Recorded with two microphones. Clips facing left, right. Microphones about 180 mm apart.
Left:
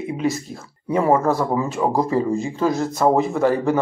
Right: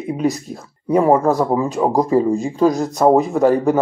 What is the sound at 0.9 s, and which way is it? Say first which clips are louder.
Speech: right 4 dB; 15° right (ahead or behind).